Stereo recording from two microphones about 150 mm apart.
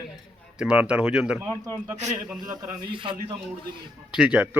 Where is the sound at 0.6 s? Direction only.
5° right (ahead or behind).